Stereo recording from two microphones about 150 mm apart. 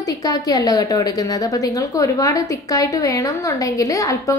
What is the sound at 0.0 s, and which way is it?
A woman's voice, 25° left (ahead or behind).